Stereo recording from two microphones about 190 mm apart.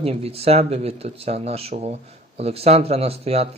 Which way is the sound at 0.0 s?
30° right (ahead or behind).